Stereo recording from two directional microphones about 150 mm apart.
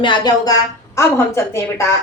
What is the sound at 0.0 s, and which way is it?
Speech, 30° left (ahead or behind).